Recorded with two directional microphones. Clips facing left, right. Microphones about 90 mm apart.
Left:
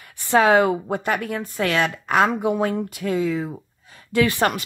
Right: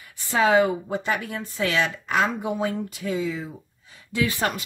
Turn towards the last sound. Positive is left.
turn(degrees=65)  # may be behind; listen again after turning